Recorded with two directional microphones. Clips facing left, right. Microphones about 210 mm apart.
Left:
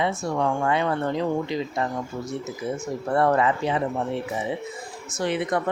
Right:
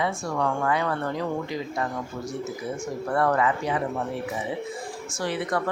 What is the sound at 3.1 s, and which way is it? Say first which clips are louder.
Speech: left 2 dB; 25° left (ahead or behind).